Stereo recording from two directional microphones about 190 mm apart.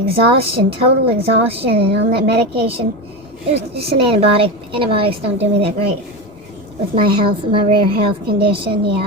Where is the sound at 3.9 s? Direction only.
30° right (ahead or behind).